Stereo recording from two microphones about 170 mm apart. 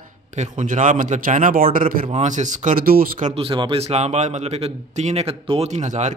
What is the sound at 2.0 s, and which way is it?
A man's voice, 40° right (ahead or behind).